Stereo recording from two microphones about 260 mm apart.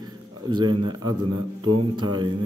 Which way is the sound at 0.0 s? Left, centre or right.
Centre.